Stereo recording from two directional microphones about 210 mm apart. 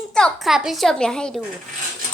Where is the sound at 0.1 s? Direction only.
5° left (ahead or behind).